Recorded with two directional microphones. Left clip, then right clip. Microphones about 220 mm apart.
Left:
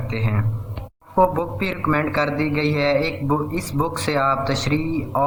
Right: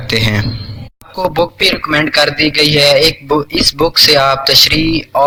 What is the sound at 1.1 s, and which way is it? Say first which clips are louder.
Speech: right 4 dB; 35° right (ahead or behind).